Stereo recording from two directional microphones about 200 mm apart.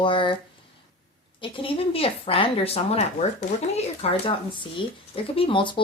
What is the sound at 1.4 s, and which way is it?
Speech, 25° left (ahead or behind).